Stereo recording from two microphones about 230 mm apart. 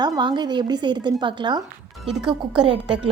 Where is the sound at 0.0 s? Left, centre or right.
Centre.